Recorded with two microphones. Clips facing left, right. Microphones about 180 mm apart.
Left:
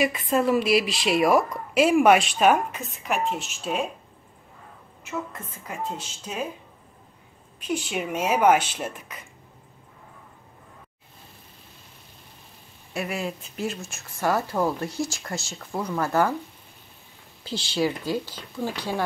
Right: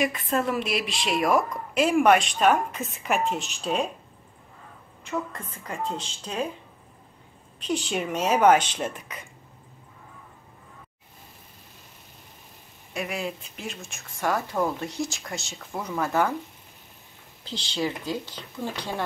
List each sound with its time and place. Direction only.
0.0 s a woman's voice: 5° left (ahead or behind)
5.0 s speech: 5° left (ahead or behind)
7.6 s speech: 10° left (ahead or behind)
12.9 s a woman's voice: centre (ahead or behind)
17.5 s speech: 10° left (ahead or behind)